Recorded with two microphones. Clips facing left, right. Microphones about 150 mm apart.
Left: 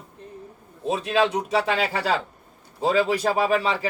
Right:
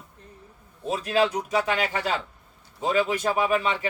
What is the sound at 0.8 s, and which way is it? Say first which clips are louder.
A man's voice: left 1 dB; 20° left (ahead or behind).